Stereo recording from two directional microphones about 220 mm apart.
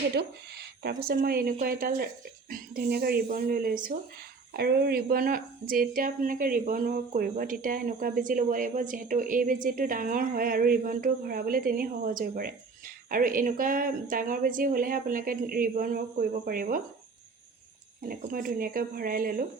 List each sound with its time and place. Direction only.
0.1 s a sound: 45° right (ahead or behind)
1.0 s speech: 40° right (ahead or behind)
18.0 s speech: 40° right (ahead or behind)